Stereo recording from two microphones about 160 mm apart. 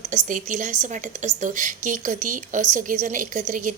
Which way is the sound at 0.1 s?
50° right (ahead or behind).